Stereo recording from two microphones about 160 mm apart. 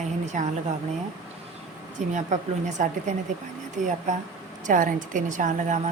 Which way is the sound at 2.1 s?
50° right (ahead or behind).